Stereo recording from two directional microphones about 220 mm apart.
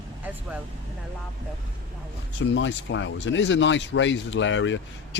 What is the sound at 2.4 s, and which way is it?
Speech, 55° left (ahead or behind).